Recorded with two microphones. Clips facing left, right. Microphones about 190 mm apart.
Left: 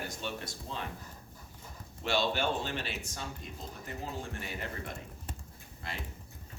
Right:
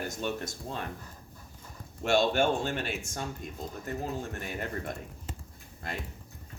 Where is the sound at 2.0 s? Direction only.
50° right (ahead or behind).